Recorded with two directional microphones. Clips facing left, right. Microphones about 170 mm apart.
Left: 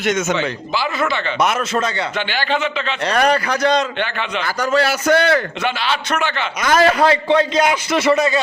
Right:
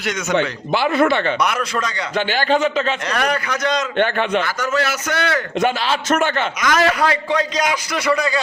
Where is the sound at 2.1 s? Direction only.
40° right (ahead or behind).